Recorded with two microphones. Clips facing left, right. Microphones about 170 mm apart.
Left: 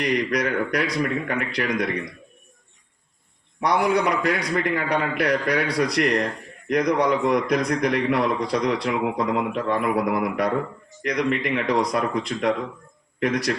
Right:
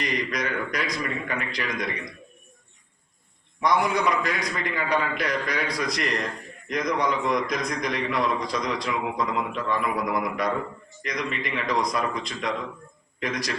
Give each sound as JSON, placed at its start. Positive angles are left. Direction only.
{"t": 0.0, "sound": "a man's voice", "side_deg": 65}
{"t": 3.8, "sound": "a man's voice", "side_deg": 65}